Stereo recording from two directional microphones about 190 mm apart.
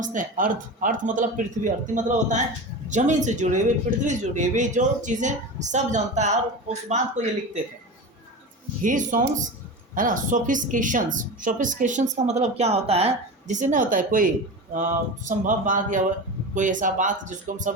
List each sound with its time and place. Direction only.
0.0 s a woman's voice: 45° right (ahead or behind)
8.8 s a woman's voice: 45° right (ahead or behind)